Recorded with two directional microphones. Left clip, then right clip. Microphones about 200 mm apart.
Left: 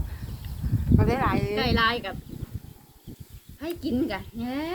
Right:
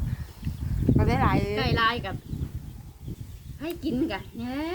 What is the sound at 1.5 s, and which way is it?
Speech, 20° left (ahead or behind).